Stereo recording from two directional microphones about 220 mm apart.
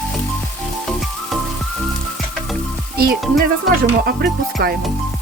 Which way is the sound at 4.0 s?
45° right (ahead or behind).